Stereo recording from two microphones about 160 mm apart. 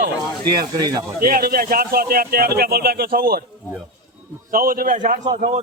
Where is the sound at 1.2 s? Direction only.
70° right (ahead or behind).